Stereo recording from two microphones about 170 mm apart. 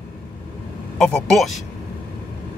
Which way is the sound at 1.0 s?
5° left (ahead or behind).